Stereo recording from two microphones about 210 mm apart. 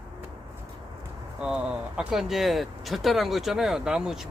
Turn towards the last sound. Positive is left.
turn(degrees=0)  # may be behind; listen again after turning